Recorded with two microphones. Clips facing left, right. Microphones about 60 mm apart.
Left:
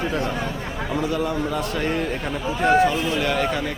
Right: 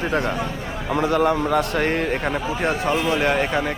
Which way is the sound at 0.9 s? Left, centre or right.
Right.